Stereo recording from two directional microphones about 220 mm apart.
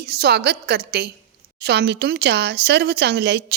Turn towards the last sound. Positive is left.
turn(degrees=-50)  # may be behind; listen again after turning